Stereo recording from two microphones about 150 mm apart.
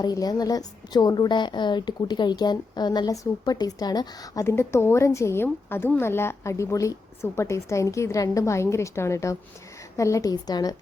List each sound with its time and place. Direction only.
0.0 s a woman's voice: 25° left (ahead or behind)